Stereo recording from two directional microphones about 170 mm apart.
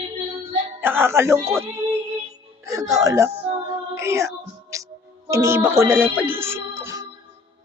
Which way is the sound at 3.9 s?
15° right (ahead or behind).